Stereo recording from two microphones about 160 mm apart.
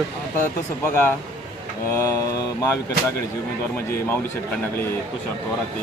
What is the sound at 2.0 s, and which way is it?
Mantra, 20° left (ahead or behind).